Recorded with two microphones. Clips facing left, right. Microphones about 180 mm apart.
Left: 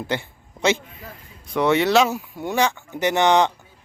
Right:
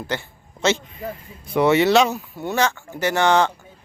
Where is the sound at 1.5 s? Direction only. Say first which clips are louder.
Right 2 dB; 5° right (ahead or behind).